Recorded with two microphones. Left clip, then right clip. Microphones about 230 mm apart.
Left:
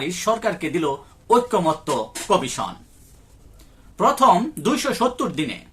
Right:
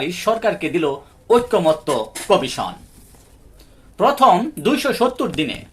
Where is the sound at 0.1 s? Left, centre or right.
Centre.